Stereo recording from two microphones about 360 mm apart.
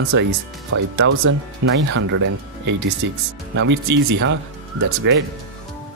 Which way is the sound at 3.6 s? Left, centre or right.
Right.